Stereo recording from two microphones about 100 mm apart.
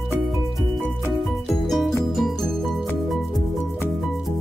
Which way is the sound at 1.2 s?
Centre (ahead or behind).